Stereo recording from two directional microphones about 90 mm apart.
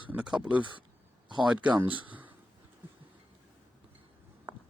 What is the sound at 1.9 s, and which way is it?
Speech, 70° right (ahead or behind).